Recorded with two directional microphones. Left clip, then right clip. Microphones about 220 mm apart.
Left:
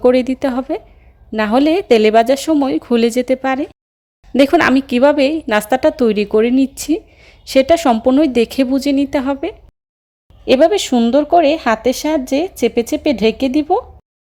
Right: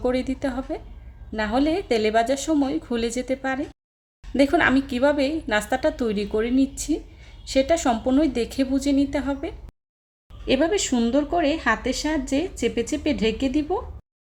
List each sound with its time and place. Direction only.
0.0 s a woman's voice: 35° left (ahead or behind)